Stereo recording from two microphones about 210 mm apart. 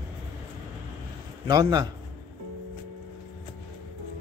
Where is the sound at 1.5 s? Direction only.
20° right (ahead or behind).